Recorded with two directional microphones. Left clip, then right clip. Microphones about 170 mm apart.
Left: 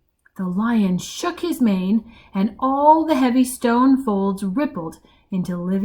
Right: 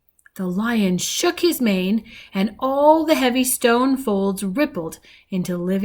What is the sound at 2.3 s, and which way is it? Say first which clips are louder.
Speech: left 1 dB; 45° right (ahead or behind).